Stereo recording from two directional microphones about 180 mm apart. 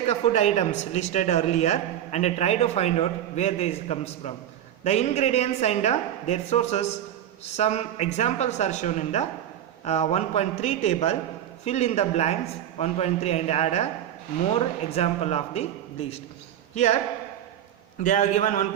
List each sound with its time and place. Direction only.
0.1 s speech: 40° left (ahead or behind)
14.8 s speech: 35° left (ahead or behind)
18.0 s a man's voice: 45° left (ahead or behind)